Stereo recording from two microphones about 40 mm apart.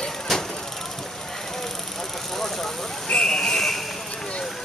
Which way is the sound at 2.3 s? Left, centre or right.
Centre.